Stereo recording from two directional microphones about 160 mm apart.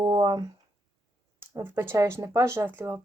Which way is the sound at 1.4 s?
15° right (ahead or behind).